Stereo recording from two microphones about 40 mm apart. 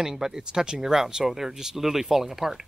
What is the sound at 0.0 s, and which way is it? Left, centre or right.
Speech, centre.